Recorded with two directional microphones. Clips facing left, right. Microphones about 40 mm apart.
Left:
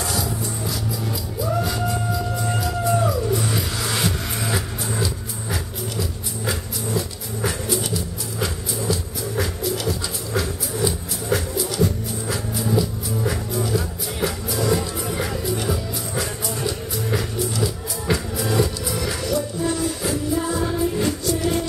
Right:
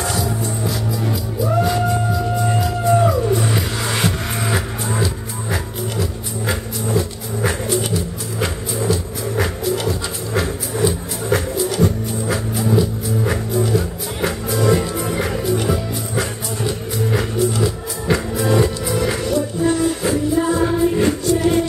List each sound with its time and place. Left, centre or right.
0.0 s music: right
9.4 s music: right